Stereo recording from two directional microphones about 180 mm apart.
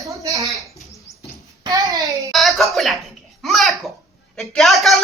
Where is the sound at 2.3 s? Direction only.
Centre (ahead or behind).